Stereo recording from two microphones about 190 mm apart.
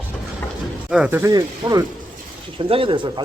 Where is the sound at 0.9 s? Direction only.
5° right (ahead or behind).